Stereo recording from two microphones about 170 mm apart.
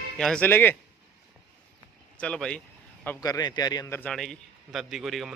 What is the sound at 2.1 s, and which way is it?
Speech, 5° left (ahead or behind).